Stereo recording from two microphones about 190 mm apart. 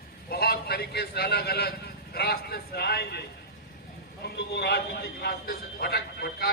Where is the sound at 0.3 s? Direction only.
55° left (ahead or behind).